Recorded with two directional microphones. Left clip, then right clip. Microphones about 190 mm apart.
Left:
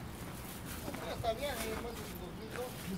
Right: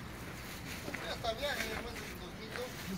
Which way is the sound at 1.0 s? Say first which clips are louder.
Left 1 dB; 45° left (ahead or behind).